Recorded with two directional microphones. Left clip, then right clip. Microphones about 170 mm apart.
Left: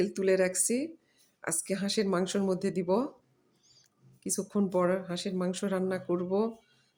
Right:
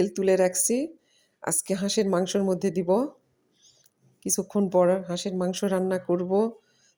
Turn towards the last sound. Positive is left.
turn(degrees=-25)  # may be behind; listen again after turning